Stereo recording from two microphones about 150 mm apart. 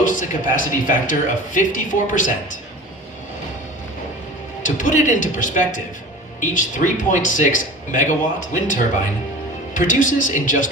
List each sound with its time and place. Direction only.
0.0 s speech: 60° left (ahead or behind)
4.6 s speech: 60° left (ahead or behind)